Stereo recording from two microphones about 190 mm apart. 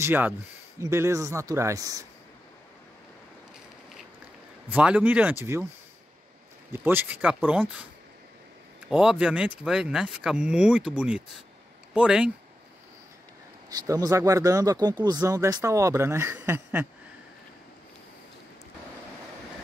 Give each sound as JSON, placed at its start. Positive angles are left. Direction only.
{"t": 0.0, "sound": "speech", "side_deg": -10}
{"t": 4.6, "sound": "speech", "side_deg": -5}
{"t": 6.7, "sound": "speech", "side_deg": -10}
{"t": 8.9, "sound": "speech", "side_deg": -5}
{"t": 13.7, "sound": "speech", "side_deg": -20}